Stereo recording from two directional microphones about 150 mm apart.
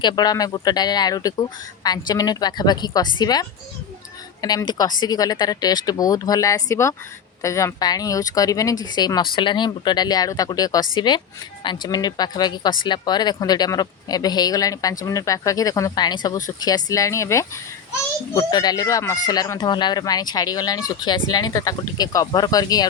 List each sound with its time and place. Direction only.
0.0 s speech: 25° left (ahead or behind)